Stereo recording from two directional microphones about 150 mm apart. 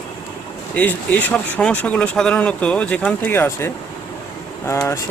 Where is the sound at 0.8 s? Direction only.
10° left (ahead or behind).